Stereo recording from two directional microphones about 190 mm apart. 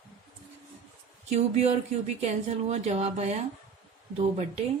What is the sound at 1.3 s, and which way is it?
Speech, 35° right (ahead or behind).